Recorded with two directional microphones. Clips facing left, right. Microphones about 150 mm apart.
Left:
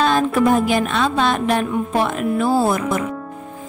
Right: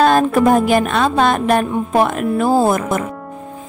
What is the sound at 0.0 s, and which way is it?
Speech, 50° right (ahead or behind).